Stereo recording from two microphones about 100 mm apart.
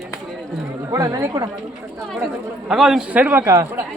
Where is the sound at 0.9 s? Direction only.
35° right (ahead or behind).